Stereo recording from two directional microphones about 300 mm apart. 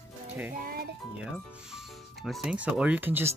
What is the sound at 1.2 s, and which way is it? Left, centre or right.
Speech, centre.